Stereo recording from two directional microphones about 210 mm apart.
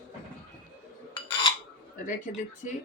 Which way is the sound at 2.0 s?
35° left (ahead or behind).